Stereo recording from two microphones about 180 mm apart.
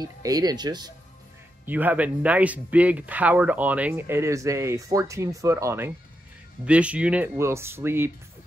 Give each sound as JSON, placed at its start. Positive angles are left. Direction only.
{"t": 0.0, "sound": "speech", "side_deg": -20}
{"t": 1.7, "sound": "speech", "side_deg": -10}